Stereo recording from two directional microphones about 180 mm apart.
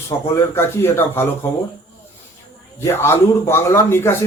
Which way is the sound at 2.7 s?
15° left (ahead or behind).